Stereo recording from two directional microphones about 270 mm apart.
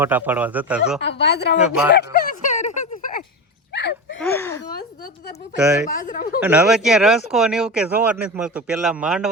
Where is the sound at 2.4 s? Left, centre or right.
Left.